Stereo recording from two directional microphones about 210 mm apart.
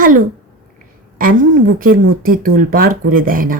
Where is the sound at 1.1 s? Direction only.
40° right (ahead or behind).